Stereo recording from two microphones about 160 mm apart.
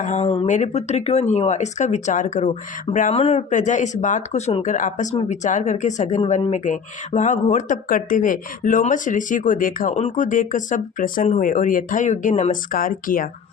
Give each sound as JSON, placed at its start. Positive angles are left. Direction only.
{"t": 0.0, "sound": "speech", "side_deg": 45}
{"t": 0.4, "sound": "speech", "side_deg": 50}